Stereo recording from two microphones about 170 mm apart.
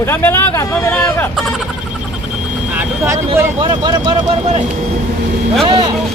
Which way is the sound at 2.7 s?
10° right (ahead or behind).